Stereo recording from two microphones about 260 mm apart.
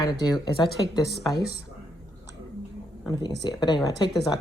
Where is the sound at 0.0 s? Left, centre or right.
Centre.